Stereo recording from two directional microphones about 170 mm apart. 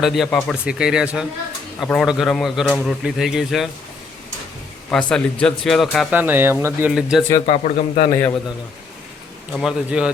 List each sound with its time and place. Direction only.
0.0 s speech: centre (ahead or behind)
4.9 s speech: 5° left (ahead or behind)
6.1 s speech: 10° right (ahead or behind)
7.4 s a man's voice: 45° left (ahead or behind)
9.5 s speech: centre (ahead or behind)